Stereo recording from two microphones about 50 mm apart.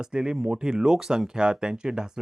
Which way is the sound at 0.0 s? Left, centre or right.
Centre.